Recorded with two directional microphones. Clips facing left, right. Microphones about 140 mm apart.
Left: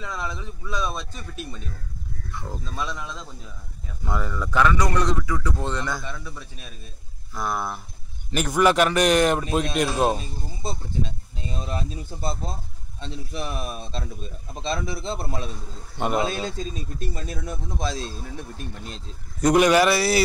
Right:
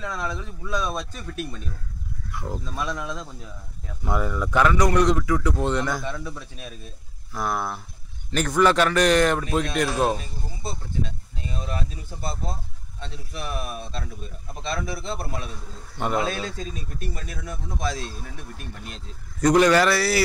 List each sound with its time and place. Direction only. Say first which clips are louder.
0.0 s speech: right 2 dB; 5° left (ahead or behind)
0.9 s speech: right 3 dB; 10° right (ahead or behind)
6.0 s speech: right 4 dB; centre (ahead or behind)
8.3 s a man's voice: even; 10° left (ahead or behind)
19.4 s speech: even; 15° left (ahead or behind)